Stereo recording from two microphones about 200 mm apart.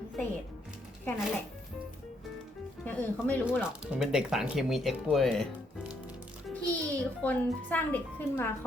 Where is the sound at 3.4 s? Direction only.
5° right (ahead or behind).